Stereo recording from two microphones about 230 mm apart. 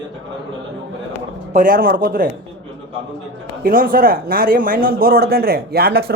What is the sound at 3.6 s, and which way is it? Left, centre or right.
A man's voice, right.